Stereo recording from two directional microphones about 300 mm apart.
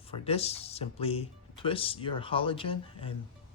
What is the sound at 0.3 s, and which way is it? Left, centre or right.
Speech, centre.